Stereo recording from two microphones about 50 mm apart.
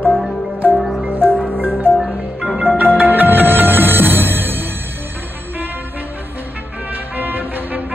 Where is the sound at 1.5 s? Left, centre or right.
Right.